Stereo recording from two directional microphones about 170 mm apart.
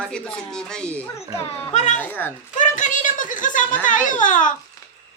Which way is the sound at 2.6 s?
50° left (ahead or behind).